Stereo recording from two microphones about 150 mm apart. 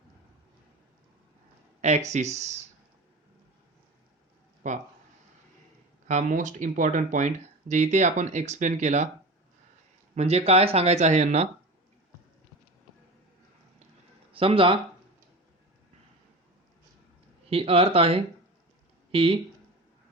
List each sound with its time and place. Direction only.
1.8 s speech: 50° right (ahead or behind)
4.6 s speech: 55° right (ahead or behind)
6.1 s speech: 55° right (ahead or behind)
10.2 s speech: 45° right (ahead or behind)
14.3 s speech: 35° right (ahead or behind)
17.5 s speech: 40° right (ahead or behind)